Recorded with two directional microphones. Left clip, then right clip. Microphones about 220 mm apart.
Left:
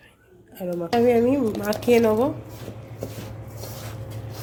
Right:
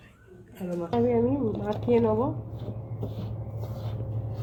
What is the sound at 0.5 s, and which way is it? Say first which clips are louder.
Speech: left 6 dB; 60° left (ahead or behind).